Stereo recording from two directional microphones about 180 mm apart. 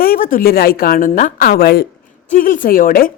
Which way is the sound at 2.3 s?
50° left (ahead or behind).